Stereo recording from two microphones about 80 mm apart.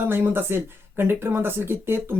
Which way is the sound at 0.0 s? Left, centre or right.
Right.